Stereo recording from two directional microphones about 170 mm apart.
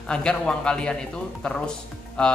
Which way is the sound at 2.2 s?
5° left (ahead or behind).